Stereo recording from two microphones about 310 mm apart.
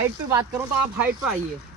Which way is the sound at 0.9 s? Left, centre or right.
Centre.